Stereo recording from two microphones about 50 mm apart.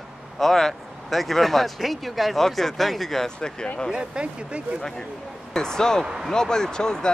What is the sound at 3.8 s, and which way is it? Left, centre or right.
Speech, centre.